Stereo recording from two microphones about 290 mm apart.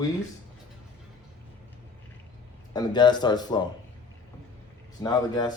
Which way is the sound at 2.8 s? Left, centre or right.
Centre.